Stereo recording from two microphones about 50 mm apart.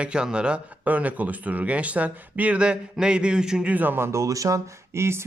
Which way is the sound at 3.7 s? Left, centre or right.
Right.